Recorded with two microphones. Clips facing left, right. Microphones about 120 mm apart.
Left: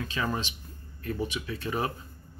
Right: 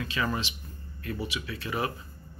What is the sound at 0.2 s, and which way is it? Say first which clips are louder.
Speech: right 1 dB; 15° left (ahead or behind).